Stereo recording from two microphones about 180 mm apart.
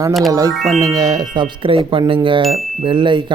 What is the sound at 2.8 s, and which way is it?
Speech, 25° right (ahead or behind).